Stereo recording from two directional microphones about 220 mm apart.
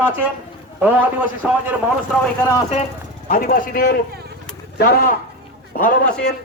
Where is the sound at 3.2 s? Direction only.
40° left (ahead or behind).